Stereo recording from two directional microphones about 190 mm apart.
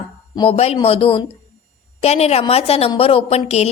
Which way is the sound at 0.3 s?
30° left (ahead or behind).